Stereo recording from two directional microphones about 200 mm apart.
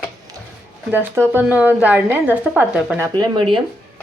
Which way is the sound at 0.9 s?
10° right (ahead or behind).